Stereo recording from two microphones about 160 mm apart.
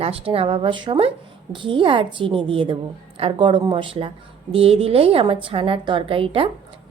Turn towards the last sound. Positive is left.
turn(degrees=-35)  # may be behind; listen again after turning